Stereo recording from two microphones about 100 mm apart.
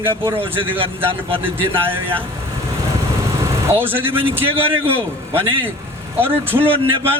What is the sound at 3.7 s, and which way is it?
Speech, 20° right (ahead or behind).